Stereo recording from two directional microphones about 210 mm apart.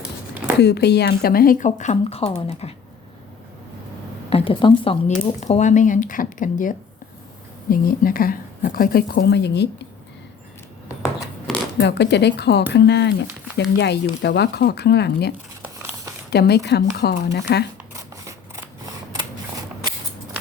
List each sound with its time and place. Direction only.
0.6 s a woman's voice: 50° left (ahead or behind); by 2.7 s 30° left (ahead or behind)
4.3 s a woman's voice: 25° left (ahead or behind); by 9.8 s 55° left (ahead or behind)
11.8 s a woman's voice: 55° left (ahead or behind)
16.3 s speech: 50° left (ahead or behind)